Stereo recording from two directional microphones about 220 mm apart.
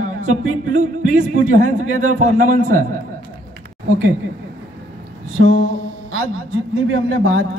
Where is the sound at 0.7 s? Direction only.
35° right (ahead or behind).